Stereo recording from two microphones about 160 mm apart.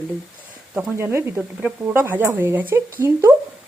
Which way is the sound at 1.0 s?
15° right (ahead or behind).